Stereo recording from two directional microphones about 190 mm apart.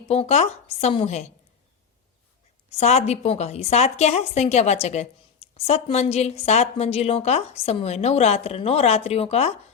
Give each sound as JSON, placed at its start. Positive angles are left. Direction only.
{"t": 0.1, "sound": "a woman's voice", "side_deg": 35}
{"t": 2.7, "sound": "a woman's voice", "side_deg": 35}